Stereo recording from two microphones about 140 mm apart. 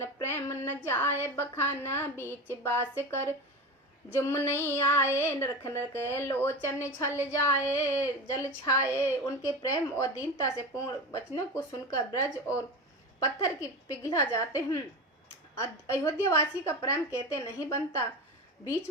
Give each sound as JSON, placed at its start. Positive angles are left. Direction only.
{"t": 0.0, "sound": "child singing", "side_deg": 15}
{"t": 0.9, "sound": "a woman's voice", "side_deg": 15}